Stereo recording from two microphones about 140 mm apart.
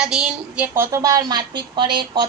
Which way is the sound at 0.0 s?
5° right (ahead or behind).